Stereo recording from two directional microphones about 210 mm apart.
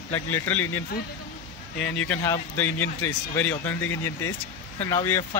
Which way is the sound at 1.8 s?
70° left (ahead or behind).